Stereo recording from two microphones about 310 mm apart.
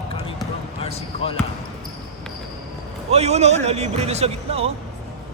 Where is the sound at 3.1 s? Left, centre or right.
Right.